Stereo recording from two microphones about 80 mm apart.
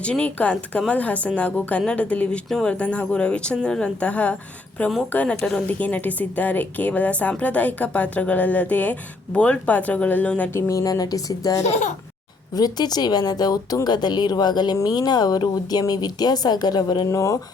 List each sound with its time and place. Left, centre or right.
0.0 s a woman's voice: centre
10.5 s speech: left
17.1 s speech: left